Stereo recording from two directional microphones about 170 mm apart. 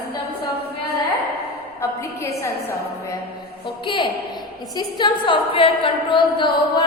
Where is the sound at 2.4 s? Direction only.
15° left (ahead or behind).